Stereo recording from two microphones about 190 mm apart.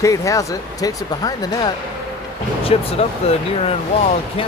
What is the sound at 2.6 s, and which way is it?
Speech, 30° left (ahead or behind).